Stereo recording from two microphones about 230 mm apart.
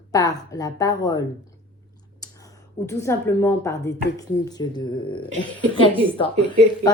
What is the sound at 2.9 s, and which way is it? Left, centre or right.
A woman's voice, centre.